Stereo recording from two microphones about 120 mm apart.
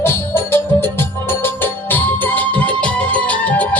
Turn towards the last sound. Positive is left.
turn(degrees=10)  # may be behind; listen again after turning